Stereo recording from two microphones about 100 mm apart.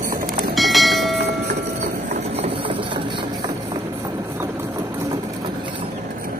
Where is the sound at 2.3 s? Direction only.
80° right; by 3.5 s 55° right (ahead or behind).